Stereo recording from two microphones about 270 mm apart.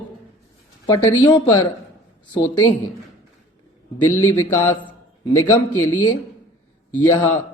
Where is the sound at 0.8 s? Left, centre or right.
Centre.